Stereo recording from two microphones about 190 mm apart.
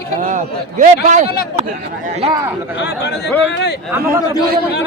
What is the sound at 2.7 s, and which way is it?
Speech, 65° left (ahead or behind).